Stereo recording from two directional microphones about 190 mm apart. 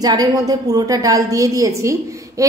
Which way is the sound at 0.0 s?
20° right (ahead or behind).